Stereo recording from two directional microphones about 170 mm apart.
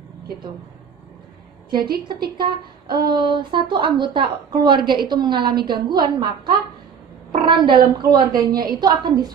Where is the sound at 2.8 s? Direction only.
60° right (ahead or behind).